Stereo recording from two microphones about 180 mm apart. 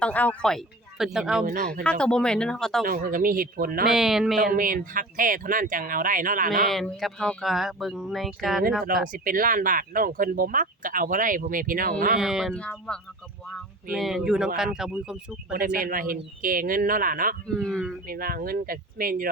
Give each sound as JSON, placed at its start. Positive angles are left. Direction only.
{"t": 0.0, "sound": "speech", "side_deg": 10}
{"t": 1.5, "sound": "speech", "side_deg": -50}
{"t": 1.8, "sound": "speech", "side_deg": 5}
{"t": 2.8, "sound": "speech", "side_deg": -50}
{"t": 3.8, "sound": "speech", "side_deg": 0}
{"t": 4.5, "sound": "speech", "side_deg": -50}
{"t": 6.7, "sound": "speech", "side_deg": 0}
{"t": 9.1, "sound": "speech", "side_deg": -50}
{"t": 12.2, "sound": "speech", "side_deg": 0}
{"t": 15.5, "sound": "speech", "side_deg": -55}
{"t": 17.5, "sound": "speech", "side_deg": 5}
{"t": 18.1, "sound": "speech", "side_deg": -55}